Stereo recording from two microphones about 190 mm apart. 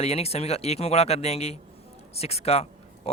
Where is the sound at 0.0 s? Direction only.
35° left (ahead or behind).